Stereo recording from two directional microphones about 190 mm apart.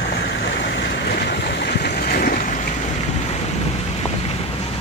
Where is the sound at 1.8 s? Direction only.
55° left (ahead or behind).